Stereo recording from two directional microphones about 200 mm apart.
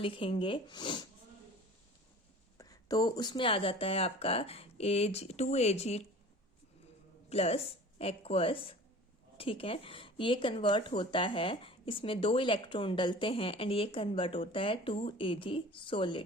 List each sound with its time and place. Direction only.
0.0 s speech: 25° left (ahead or behind)
2.6 s speech: 20° left (ahead or behind)
7.3 s speech: 30° left (ahead or behind)